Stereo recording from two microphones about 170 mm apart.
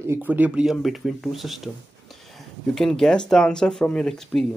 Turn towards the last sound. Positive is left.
turn(degrees=5)  # may be behind; listen again after turning